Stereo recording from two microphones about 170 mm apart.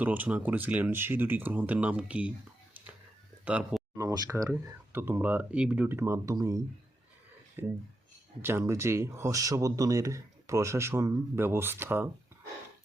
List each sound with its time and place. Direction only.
0.0 s speech: 10° right (ahead or behind)
3.4 s a sound: 5° right (ahead or behind)
3.9 s speech: 20° right (ahead or behind)
8.4 s speech: 15° right (ahead or behind)